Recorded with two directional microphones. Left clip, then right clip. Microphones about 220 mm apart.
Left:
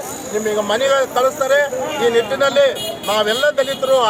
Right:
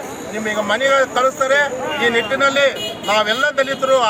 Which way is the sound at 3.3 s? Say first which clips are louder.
Left 1 dB; 5° left (ahead or behind).